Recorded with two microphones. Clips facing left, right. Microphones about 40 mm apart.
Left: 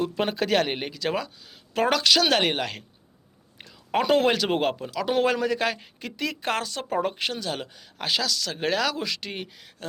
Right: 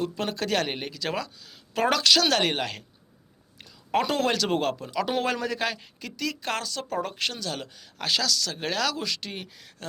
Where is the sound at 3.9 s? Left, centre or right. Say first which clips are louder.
Left 3 dB; centre.